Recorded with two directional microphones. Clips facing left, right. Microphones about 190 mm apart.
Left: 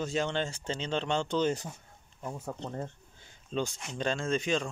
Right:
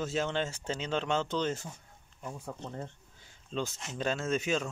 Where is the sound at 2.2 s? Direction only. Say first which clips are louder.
Left 3 dB; 40° left (ahead or behind).